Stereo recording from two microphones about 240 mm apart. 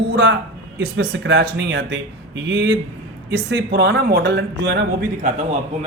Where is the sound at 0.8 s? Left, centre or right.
Right.